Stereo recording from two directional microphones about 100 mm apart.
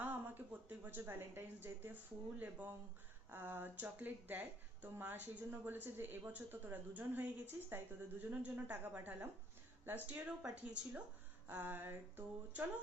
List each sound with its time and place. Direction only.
0.0 s a woman's voice: 15° right (ahead or behind)